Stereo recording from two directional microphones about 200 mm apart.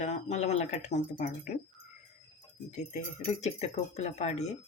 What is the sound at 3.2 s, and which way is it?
Speech, 35° left (ahead or behind).